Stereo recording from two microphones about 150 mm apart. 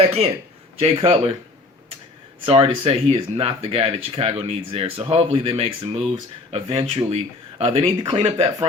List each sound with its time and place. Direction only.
0.0 s speech: 40° right (ahead or behind)
2.4 s speech: 35° right (ahead or behind)